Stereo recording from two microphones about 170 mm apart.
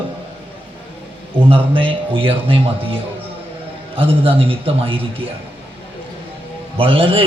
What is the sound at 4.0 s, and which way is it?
A man's voice, 35° right (ahead or behind).